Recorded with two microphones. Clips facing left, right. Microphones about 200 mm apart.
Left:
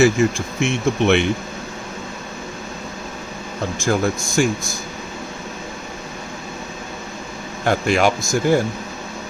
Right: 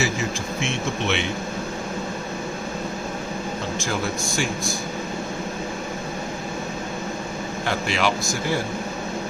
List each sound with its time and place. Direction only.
0.2 s a man's voice: 50° left (ahead or behind)
3.8 s a man's voice: 45° left (ahead or behind)
7.6 s a man's voice: 50° left (ahead or behind)